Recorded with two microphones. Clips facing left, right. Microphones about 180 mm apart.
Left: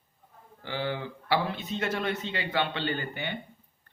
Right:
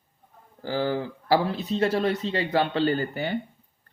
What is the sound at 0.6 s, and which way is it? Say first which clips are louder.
Speech: right 6 dB; 40° right (ahead or behind).